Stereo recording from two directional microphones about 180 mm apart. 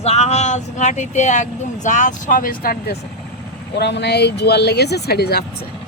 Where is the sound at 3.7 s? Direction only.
70° left (ahead or behind).